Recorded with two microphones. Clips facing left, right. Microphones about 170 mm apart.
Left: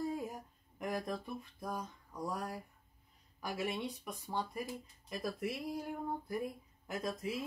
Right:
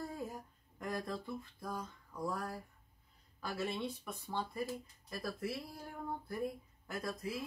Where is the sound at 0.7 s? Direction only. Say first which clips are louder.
Left 2 dB; 20° left (ahead or behind).